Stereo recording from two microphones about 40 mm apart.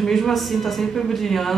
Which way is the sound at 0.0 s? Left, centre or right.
Centre.